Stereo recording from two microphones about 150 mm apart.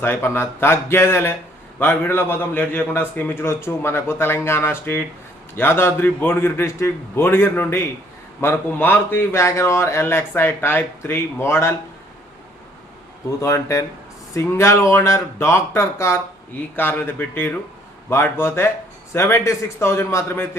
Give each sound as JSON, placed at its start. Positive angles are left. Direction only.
{"t": 0.0, "sound": "a man's voice", "side_deg": 15}
{"t": 13.4, "sound": "a man's voice", "side_deg": 20}